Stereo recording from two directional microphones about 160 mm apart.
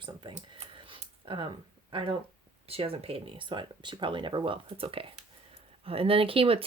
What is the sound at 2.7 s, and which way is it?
Speech, 35° right (ahead or behind).